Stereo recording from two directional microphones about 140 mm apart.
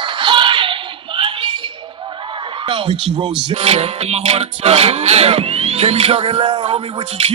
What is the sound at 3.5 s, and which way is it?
Music, 45° right (ahead or behind).